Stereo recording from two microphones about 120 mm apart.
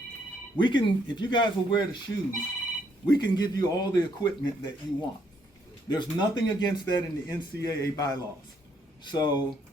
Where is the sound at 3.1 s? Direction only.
35° left (ahead or behind).